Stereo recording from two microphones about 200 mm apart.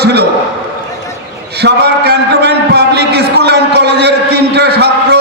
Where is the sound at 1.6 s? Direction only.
55° right (ahead or behind).